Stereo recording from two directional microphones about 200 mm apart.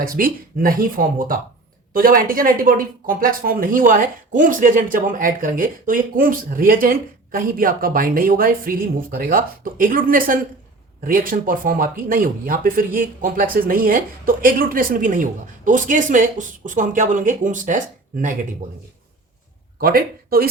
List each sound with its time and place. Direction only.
0.0 s speech: 45° right (ahead or behind)
19.8 s speech: 45° right (ahead or behind)